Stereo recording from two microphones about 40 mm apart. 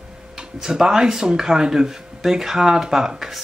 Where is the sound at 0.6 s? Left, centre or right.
Centre.